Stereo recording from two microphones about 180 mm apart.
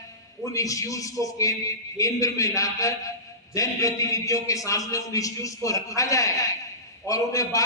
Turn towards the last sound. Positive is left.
turn(degrees=20)  # may be behind; listen again after turning